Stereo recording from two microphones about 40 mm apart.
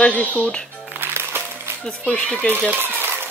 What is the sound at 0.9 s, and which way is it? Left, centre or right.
Music, right.